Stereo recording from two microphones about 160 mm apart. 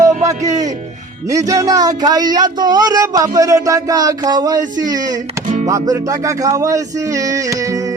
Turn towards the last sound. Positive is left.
turn(degrees=-20)  # may be behind; listen again after turning